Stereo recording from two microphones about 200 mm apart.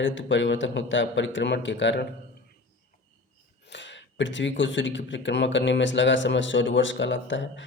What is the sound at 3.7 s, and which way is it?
Speech, 65° left (ahead or behind).